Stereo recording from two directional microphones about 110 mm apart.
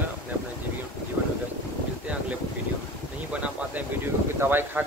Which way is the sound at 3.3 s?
10° right (ahead or behind).